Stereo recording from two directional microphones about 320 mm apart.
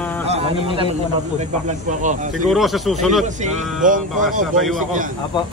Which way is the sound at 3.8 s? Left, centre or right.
Right.